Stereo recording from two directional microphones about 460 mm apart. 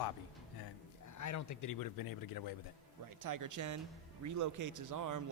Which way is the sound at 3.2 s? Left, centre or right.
Right.